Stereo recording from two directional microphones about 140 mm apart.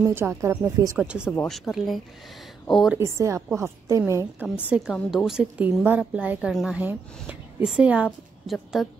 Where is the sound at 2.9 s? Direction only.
20° right (ahead or behind).